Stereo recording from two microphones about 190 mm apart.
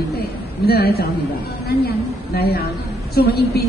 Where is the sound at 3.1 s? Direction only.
55° left (ahead or behind).